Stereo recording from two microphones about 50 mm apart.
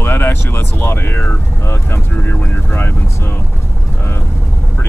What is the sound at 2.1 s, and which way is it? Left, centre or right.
Speech, left.